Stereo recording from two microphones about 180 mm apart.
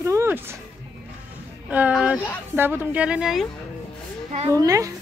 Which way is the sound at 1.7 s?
10° right (ahead or behind).